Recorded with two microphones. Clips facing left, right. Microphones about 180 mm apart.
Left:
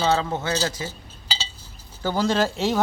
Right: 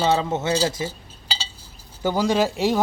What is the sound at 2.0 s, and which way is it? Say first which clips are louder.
Speech: right 2 dB; 10° right (ahead or behind).